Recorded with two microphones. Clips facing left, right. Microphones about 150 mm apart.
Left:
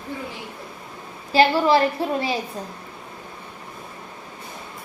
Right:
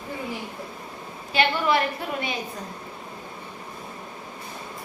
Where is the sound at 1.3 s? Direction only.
35° left (ahead or behind).